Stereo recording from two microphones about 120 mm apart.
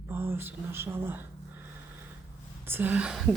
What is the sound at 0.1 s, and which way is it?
Speech, 20° right (ahead or behind).